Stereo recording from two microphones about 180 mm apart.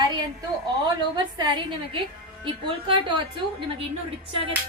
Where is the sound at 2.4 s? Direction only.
25° right (ahead or behind).